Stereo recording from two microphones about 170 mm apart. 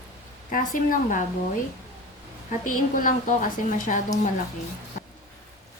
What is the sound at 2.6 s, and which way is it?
A woman's voice, 55° left (ahead or behind).